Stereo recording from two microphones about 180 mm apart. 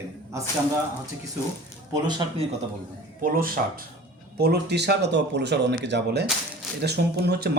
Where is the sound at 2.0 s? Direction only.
25° right (ahead or behind).